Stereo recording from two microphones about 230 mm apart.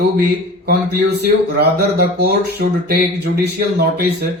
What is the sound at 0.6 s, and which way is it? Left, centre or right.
Speech, right.